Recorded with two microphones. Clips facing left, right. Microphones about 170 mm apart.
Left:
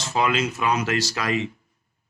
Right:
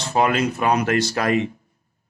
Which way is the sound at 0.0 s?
55° right (ahead or behind).